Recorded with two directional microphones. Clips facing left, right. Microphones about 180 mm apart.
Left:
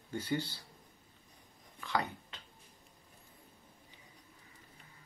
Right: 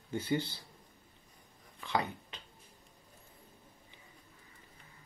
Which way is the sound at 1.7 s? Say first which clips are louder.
Right 1 dB; 20° right (ahead or behind).